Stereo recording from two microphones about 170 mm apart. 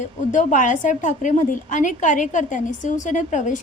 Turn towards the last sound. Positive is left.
turn(degrees=45)  # may be behind; listen again after turning